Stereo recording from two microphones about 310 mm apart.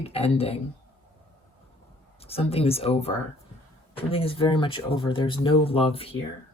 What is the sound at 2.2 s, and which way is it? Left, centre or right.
Speech, centre.